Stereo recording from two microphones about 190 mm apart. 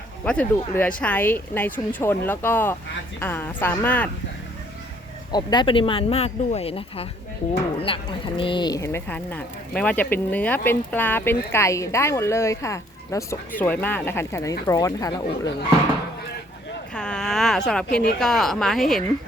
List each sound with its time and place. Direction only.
0.3 s speech: 10° left (ahead or behind)
5.3 s speech: 25° left (ahead or behind)
16.9 s a sound: 5° left (ahead or behind)
17.7 s a woman's voice: 5° left (ahead or behind)